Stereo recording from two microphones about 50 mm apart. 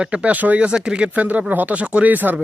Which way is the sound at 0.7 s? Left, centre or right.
Centre.